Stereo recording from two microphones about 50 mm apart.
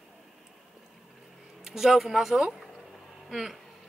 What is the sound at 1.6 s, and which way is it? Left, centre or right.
Speech, centre.